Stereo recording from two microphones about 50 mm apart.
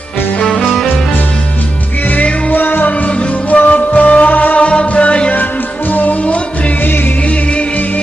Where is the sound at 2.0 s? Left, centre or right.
Left.